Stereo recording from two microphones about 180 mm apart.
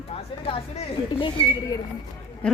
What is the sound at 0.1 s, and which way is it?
Speech, 30° left (ahead or behind).